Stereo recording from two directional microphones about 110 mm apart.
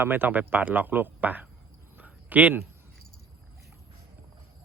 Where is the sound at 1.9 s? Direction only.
15° right (ahead or behind).